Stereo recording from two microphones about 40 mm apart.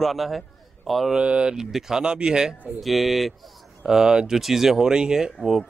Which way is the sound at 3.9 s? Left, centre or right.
Centre.